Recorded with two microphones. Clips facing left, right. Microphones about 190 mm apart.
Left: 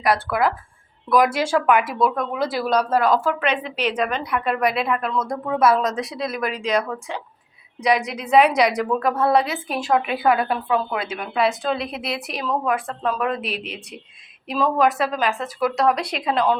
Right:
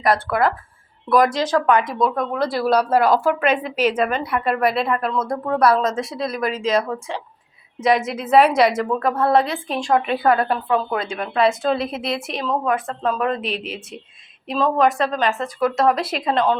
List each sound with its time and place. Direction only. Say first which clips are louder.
0.0 s a woman's voice: right 2 dB; centre (ahead or behind)
3.2 s speech: right 3 dB; 45° right (ahead or behind)
3.9 s a woman's voice: right 2 dB; 5° right (ahead or behind)